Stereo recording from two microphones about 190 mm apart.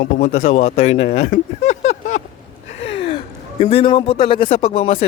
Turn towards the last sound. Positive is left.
turn(degrees=30)  # may be behind; listen again after turning